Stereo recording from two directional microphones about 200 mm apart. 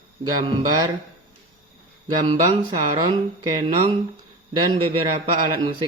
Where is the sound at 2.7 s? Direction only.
20° right (ahead or behind).